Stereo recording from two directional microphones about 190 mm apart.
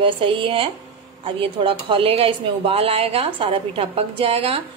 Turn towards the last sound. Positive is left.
turn(degrees=-30)  # may be behind; listen again after turning